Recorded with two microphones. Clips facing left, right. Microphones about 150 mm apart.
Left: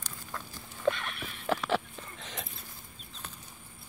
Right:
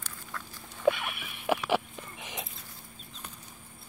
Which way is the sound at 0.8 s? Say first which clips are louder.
Right 3 dB; 10° right (ahead or behind).